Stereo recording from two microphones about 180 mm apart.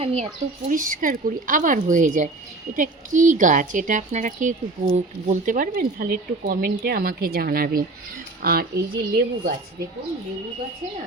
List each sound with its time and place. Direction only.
0.0 s speech: 35° right (ahead or behind)
0.7 s a woman's voice: 45° right (ahead or behind)